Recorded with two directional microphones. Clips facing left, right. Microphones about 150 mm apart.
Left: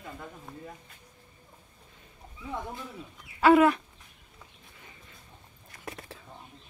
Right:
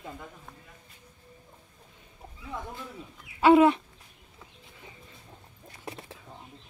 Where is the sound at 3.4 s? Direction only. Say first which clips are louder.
Right 1 dB; 25° right (ahead or behind).